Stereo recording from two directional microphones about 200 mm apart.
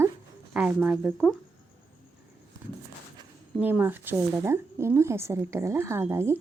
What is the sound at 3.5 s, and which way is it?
A woman's voice, 10° right (ahead or behind).